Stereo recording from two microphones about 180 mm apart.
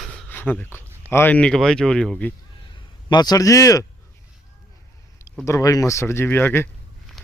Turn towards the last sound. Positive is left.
turn(degrees=10)  # may be behind; listen again after turning